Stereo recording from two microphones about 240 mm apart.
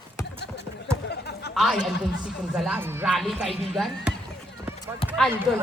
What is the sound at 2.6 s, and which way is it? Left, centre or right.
Speech, centre.